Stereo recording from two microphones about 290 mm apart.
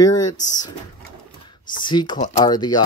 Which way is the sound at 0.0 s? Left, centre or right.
Centre.